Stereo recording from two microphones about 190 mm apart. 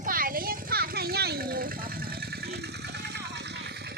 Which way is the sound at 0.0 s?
50° right (ahead or behind).